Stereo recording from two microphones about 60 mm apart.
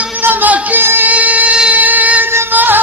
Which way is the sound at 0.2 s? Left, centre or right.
Right.